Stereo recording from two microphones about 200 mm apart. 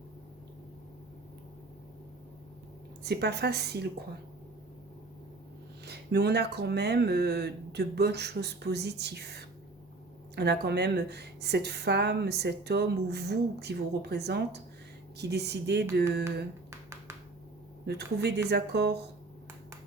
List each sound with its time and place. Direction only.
3.0 s a woman's voice: 55° right (ahead or behind)
5.8 s a woman's voice: 55° right (ahead or behind)
17.8 s a woman's voice: 55° right (ahead or behind)